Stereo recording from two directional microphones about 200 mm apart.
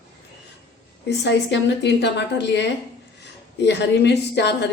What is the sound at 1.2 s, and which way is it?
A woman's voice, 60° left (ahead or behind).